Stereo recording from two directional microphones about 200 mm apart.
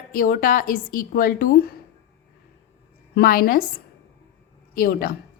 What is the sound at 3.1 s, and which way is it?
Speech, 50° left (ahead or behind).